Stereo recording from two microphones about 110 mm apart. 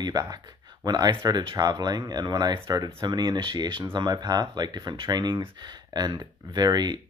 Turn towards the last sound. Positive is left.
turn(degrees=-40)  # may be behind; listen again after turning